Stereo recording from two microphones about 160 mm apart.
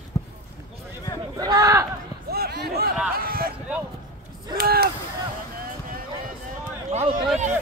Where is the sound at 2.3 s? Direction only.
80° right.